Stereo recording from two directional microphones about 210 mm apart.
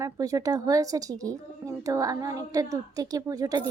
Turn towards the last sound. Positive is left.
turn(degrees=-15)  # may be behind; listen again after turning